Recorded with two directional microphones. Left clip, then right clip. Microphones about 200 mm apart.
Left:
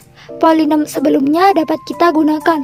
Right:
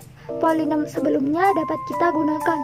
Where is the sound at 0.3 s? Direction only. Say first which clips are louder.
Left 9 dB; 50° left (ahead or behind).